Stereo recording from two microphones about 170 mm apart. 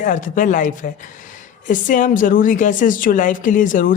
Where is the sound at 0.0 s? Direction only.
50° left (ahead or behind).